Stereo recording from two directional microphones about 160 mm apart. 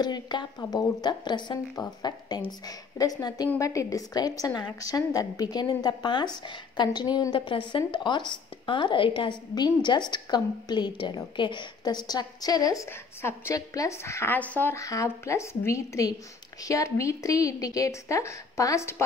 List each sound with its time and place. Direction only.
0.0 s a woman's voice: 25° left (ahead or behind)